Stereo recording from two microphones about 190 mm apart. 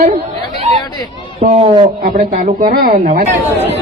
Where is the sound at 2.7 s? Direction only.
55° right (ahead or behind).